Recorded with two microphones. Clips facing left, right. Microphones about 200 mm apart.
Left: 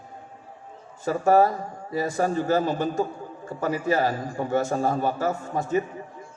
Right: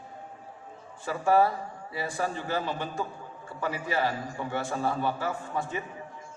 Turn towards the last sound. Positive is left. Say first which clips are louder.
# left 7 dB
turn(degrees=40)  # may be behind; listen again after turning